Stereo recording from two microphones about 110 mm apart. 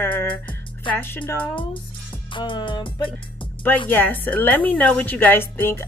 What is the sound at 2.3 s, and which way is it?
Music, 45° left (ahead or behind).